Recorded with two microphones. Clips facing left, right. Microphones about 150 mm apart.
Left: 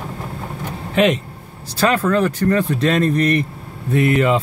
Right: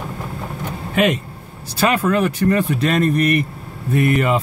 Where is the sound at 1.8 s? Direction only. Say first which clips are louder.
Left 1 dB; 10° right (ahead or behind).